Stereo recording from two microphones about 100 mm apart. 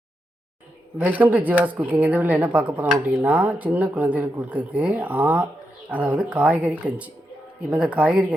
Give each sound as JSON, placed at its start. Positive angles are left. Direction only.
{"t": 0.9, "sound": "speech", "side_deg": -15}